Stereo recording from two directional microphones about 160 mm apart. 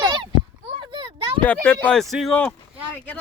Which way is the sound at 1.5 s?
10° left (ahead or behind).